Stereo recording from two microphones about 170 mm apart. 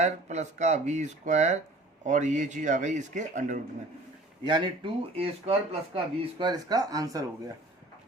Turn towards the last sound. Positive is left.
turn(degrees=-20)  # may be behind; listen again after turning